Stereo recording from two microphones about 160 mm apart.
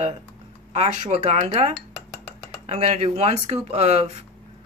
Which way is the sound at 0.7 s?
40° right (ahead or behind).